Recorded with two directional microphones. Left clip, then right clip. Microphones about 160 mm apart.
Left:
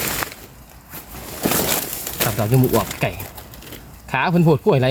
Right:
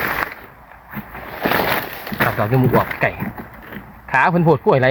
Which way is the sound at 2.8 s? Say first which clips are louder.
Right 4 dB; 50° left (ahead or behind).